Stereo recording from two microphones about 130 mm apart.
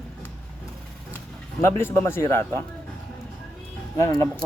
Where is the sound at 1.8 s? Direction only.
20° left (ahead or behind).